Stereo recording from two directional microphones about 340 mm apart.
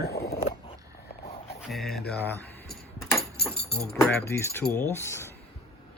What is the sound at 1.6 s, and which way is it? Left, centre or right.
Speech, centre.